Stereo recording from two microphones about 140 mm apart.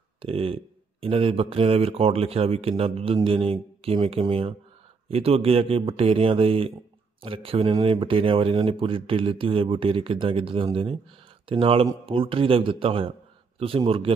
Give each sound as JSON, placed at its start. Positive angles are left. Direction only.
{"t": 0.2, "sound": "speech", "side_deg": -40}